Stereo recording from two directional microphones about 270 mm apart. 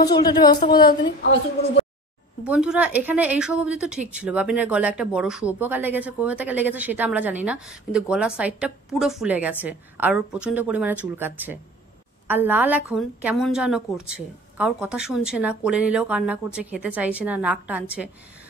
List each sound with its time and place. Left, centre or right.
0.0 s a woman's voice: centre
2.4 s a woman's voice: centre